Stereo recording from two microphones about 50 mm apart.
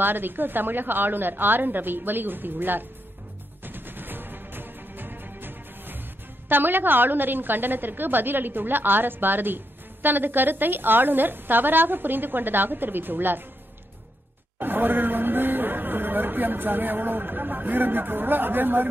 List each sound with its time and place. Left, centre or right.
0.0 s a woman's voice: right
3.6 s music: right
6.5 s a woman's voice: right
14.6 s speech: right